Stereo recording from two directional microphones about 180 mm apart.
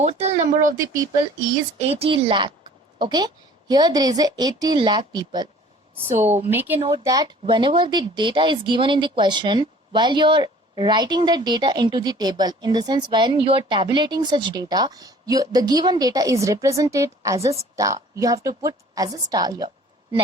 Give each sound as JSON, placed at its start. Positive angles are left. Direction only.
{"t": 0.0, "sound": "speech", "side_deg": -35}
{"t": 1.9, "sound": "speech", "side_deg": -30}
{"t": 6.1, "sound": "speech", "side_deg": -40}
{"t": 6.5, "sound": "speech", "side_deg": -10}
{"t": 6.7, "sound": "speech", "side_deg": -30}
{"t": 7.0, "sound": "speech", "side_deg": -20}